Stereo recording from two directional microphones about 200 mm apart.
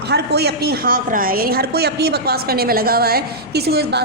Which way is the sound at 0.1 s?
55° right (ahead or behind).